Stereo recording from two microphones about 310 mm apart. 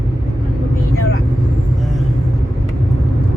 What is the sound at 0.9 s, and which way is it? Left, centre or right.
Vehicle, left.